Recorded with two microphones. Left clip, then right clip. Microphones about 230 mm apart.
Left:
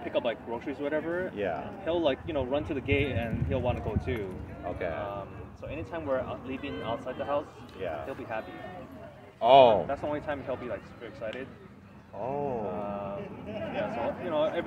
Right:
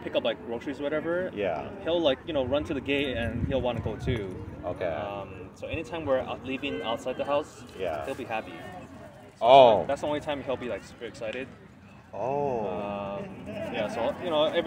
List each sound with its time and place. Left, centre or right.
0.1 s speech: right
1.3 s speech: right
1.9 s speech: right
4.6 s speech: centre
5.0 s speech: right
9.4 s speech: centre
9.8 s speech: right
12.2 s speech: centre
12.7 s a sound: right
13.7 s speech: right